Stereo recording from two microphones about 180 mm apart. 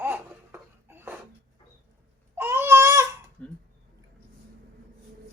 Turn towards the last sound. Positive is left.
turn(degrees=5)  # may be behind; listen again after turning